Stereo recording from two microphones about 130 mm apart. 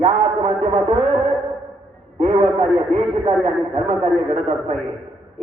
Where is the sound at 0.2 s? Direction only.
50° right (ahead or behind).